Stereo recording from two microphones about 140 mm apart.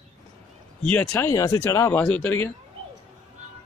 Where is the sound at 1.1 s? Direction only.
20° left (ahead or behind).